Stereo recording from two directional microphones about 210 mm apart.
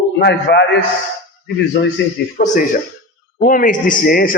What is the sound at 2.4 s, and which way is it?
A man's voice, 45° left (ahead or behind).